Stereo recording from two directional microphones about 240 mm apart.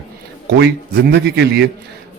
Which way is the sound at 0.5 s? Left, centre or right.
Right.